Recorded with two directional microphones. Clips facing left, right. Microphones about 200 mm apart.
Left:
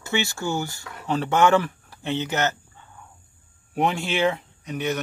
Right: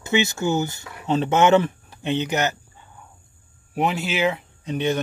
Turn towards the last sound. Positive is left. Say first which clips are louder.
# right 4 dB
turn(degrees=-25)  # may be behind; listen again after turning